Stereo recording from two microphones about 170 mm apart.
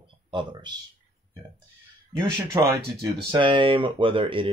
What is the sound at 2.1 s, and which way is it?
Speech, 25° right (ahead or behind).